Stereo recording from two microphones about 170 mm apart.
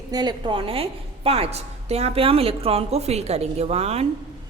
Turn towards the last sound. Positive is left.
turn(degrees=-35)  # may be behind; listen again after turning